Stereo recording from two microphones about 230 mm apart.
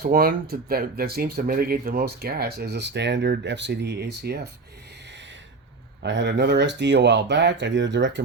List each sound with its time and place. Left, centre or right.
0.0 s speech: right
6.0 s speech: right